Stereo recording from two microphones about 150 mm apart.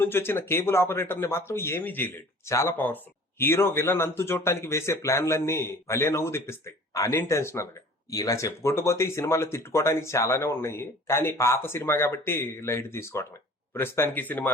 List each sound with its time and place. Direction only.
0.0 s speech: 15° left (ahead or behind)